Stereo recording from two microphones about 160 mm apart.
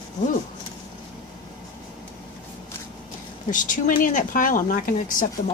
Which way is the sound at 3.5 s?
55° left (ahead or behind).